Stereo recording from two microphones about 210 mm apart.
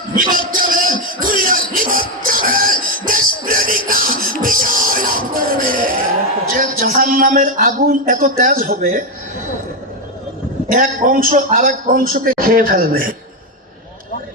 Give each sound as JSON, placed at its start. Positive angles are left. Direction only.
{"t": 0.2, "sound": "music", "side_deg": -40}
{"t": 6.5, "sound": "a man's voice", "side_deg": -40}
{"t": 10.7, "sound": "a man's voice", "side_deg": -40}